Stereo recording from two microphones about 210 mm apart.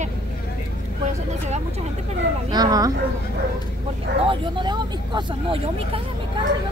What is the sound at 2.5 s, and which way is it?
Speech, 20° right (ahead or behind).